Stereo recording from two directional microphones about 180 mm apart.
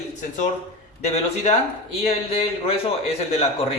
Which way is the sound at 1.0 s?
35° left (ahead or behind).